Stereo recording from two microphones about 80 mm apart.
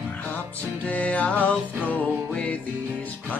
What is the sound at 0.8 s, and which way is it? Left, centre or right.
Music, centre.